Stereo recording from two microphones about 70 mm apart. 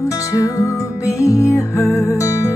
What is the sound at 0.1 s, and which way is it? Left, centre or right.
Music, left.